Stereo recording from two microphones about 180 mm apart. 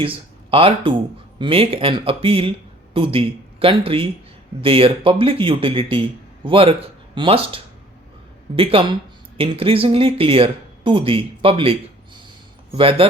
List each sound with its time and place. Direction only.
0.0 s speech: 30° right (ahead or behind)